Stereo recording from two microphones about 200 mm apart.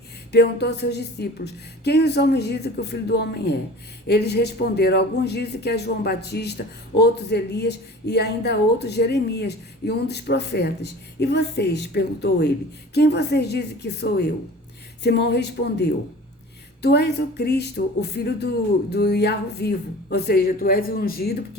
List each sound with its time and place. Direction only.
0.3 s speech: 55° left (ahead or behind)